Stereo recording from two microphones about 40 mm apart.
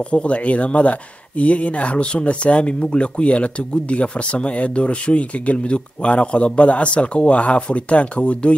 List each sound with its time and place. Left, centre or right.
0.1 s speech: left